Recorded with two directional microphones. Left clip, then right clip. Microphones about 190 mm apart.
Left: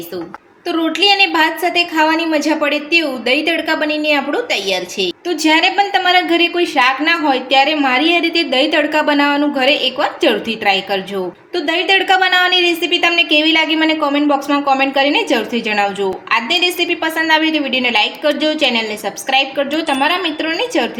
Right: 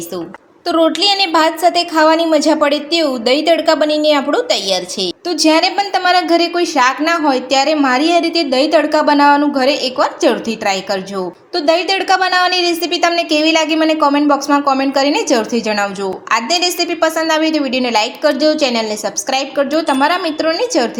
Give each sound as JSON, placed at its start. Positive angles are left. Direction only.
{"t": 0.7, "sound": "a woman's voice", "side_deg": -45}